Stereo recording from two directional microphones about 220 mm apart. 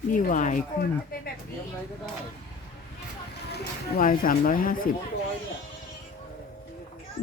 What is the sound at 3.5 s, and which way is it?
Speech, 40° left (ahead or behind).